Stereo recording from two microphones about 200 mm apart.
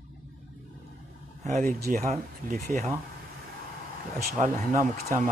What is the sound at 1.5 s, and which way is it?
Speech, 35° right (ahead or behind).